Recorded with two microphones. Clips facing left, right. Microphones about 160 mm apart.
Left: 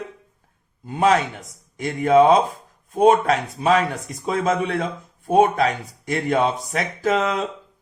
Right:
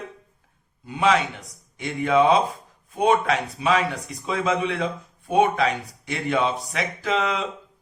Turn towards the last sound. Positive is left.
turn(degrees=45)  # may be behind; listen again after turning